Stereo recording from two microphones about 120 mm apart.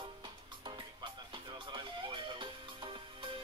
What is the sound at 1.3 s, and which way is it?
Music, 45° right (ahead or behind).